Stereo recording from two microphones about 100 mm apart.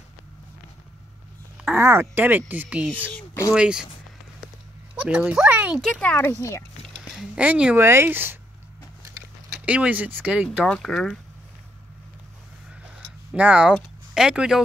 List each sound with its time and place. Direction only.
1.7 s speech: 25° right (ahead or behind); by 3.8 s 10° right (ahead or behind)
5.0 s speech: 10° right (ahead or behind)
5.9 s speech: 15° left (ahead or behind)
7.0 s a sound: 10° right (ahead or behind)
7.7 s speech: 25° right (ahead or behind)
9.5 s speech: 10° right (ahead or behind)
10.6 s speech: 5° left (ahead or behind)
13.0 s a sound: 10° right (ahead or behind)
13.7 s speech: 5° right (ahead or behind)